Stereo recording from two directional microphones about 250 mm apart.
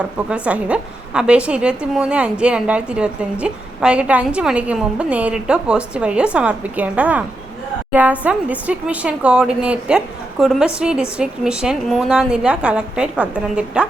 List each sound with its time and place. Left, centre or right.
0.0 s a woman's voice: centre